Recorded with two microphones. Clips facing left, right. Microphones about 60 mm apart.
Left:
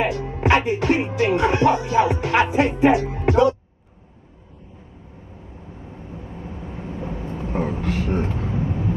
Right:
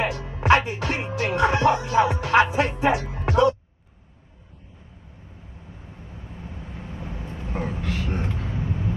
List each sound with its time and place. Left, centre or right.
0.0 s speech: left
6.4 s vehicle: left